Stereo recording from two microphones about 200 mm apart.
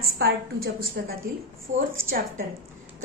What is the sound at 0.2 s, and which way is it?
Speech, 55° right (ahead or behind).